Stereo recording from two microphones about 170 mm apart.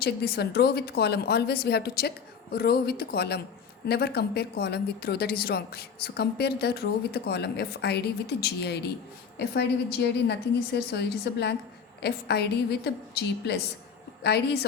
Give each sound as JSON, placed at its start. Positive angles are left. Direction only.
{"t": 0.0, "sound": "a woman's voice", "side_deg": 70}